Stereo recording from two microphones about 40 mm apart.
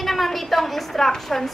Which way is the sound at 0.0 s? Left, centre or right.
Centre.